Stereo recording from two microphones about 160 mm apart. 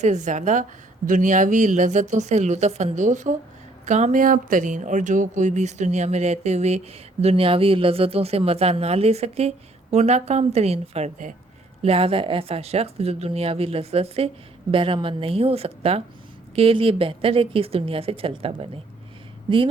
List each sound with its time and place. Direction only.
0.0 s speech: 50° right (ahead or behind)
11.8 s speech: 35° right (ahead or behind)